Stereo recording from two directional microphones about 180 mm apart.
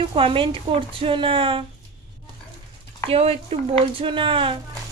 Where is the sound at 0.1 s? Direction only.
30° right (ahead or behind).